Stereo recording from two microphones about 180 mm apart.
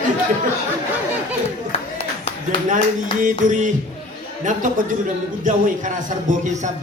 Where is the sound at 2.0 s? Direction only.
30° left (ahead or behind).